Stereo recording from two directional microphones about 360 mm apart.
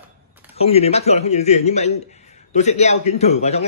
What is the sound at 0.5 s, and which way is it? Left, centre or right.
A man's voice, centre.